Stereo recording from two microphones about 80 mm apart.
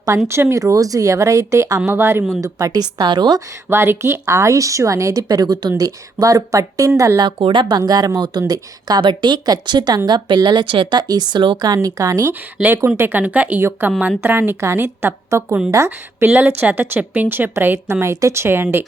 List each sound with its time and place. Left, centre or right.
0.3 s a woman's voice: right
3.7 s a woman's voice: right
7.2 s speech: right
9.0 s speech: right
11.1 s speech: right
12.6 s speech: centre
13.0 s a woman's voice: right
15.7 s a woman's voice: right
16.2 s a woman's voice: right